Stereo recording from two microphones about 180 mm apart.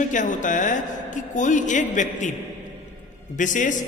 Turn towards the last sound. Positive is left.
turn(degrees=45)  # may be behind; listen again after turning